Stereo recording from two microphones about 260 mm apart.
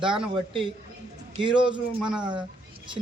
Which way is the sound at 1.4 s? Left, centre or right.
Centre.